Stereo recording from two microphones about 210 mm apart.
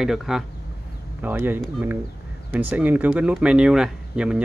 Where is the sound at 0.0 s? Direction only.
Centre (ahead or behind).